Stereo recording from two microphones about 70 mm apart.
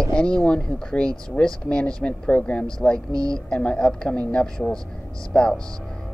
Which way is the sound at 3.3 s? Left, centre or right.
Centre.